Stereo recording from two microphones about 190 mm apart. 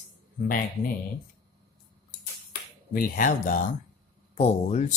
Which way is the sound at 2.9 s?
45° left (ahead or behind).